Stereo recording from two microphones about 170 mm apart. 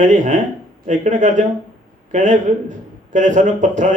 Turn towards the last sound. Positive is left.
turn(degrees=-45)  # may be behind; listen again after turning